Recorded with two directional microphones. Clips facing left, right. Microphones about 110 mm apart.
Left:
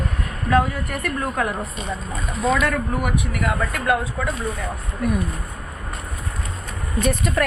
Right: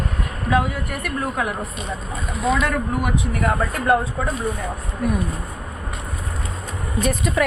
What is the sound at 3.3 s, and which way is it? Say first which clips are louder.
Speech: right 2 dB; 35° right (ahead or behind).